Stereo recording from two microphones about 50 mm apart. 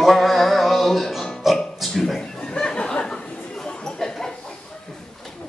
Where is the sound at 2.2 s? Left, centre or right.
Centre.